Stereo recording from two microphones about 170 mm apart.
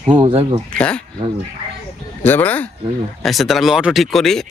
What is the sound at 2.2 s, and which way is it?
Speech, 10° left (ahead or behind).